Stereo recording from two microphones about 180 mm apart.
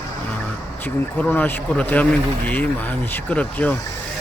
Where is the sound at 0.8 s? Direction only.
10° left (ahead or behind).